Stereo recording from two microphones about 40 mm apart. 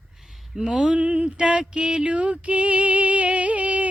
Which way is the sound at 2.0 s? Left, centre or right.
Right.